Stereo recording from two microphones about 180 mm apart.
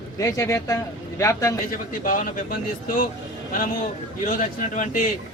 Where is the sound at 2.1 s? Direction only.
50° left (ahead or behind).